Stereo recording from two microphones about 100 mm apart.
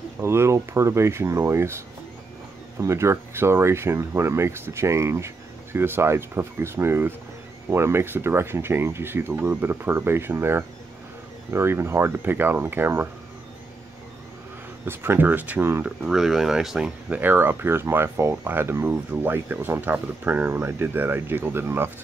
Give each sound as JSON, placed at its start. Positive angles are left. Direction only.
{"t": 0.2, "sound": "speech", "side_deg": -25}
{"t": 2.8, "sound": "speech", "side_deg": -25}
{"t": 14.9, "sound": "speech", "side_deg": -20}
{"t": 16.0, "sound": "speech", "side_deg": 0}
{"t": 17.1, "sound": "speech", "side_deg": -20}